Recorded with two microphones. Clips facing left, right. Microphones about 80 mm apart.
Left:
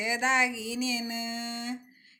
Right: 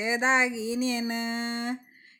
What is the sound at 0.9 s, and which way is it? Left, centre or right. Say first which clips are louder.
Speech: right 4 dB; right.